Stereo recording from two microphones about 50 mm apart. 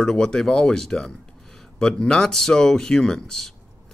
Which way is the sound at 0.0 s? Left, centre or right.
Centre.